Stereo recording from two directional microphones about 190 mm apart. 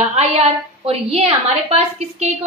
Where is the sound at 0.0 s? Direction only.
35° right (ahead or behind).